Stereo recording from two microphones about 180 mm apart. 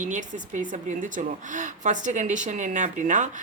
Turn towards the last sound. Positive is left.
turn(degrees=-45)  # may be behind; listen again after turning